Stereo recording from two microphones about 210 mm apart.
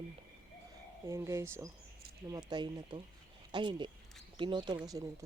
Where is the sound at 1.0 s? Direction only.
15° right (ahead or behind).